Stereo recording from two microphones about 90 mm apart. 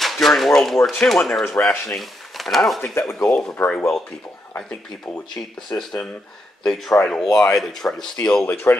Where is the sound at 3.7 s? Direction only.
10° left (ahead or behind).